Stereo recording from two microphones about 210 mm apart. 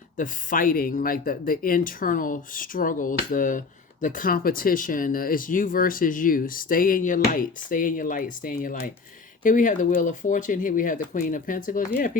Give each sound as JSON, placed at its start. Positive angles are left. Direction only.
{"t": 0.2, "sound": "speech", "side_deg": 40}